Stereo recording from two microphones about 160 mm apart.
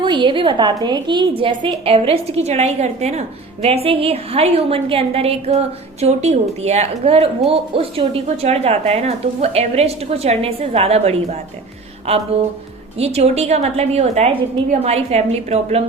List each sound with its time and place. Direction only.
0.0 s a woman's voice: 30° right (ahead or behind)